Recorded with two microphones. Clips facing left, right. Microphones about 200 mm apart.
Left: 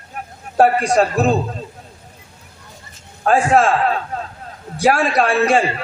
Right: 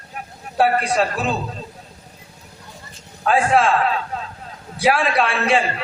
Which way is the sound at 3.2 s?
45° left (ahead or behind).